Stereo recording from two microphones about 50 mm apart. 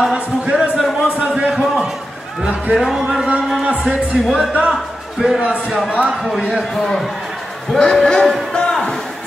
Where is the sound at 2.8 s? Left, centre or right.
Centre.